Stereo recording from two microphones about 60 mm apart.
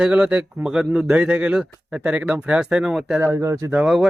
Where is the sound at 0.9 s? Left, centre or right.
Right.